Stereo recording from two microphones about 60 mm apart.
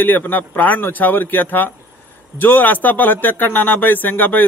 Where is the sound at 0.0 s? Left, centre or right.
Left.